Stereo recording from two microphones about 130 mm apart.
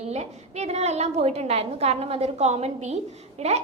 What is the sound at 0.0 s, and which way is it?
A woman's voice, 55° right (ahead or behind).